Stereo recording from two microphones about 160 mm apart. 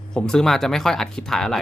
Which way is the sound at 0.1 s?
5° left (ahead or behind).